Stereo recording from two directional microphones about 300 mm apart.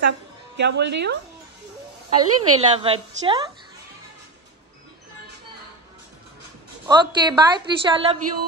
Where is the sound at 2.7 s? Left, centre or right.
Centre.